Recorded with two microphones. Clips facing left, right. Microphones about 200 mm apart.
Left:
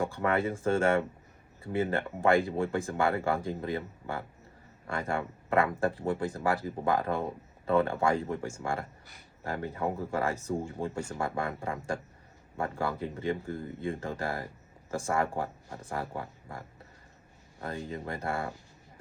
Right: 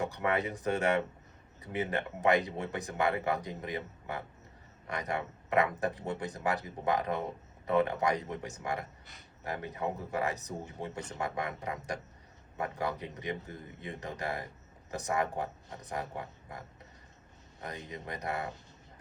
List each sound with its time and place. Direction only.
0.0 s speech: 20° right (ahead or behind)
4.9 s speech: 20° right (ahead or behind)